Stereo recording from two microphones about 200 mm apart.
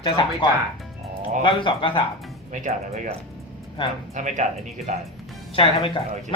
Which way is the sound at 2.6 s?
35° right (ahead or behind).